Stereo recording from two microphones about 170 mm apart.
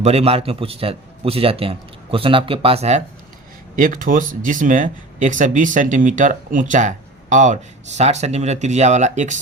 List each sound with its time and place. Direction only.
0.0 s a man's voice: 35° right (ahead or behind)
3.8 s speech: 50° right (ahead or behind)